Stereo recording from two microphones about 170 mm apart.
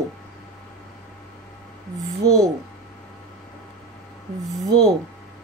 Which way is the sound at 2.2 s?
20° right (ahead or behind).